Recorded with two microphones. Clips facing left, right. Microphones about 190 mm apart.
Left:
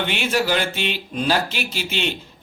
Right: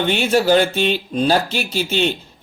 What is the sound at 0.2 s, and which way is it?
Speech, 30° right (ahead or behind).